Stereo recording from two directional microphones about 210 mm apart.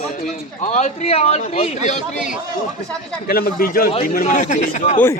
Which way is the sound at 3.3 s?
45° left (ahead or behind).